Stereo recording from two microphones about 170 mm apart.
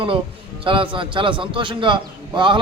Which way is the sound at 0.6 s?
30° right (ahead or behind).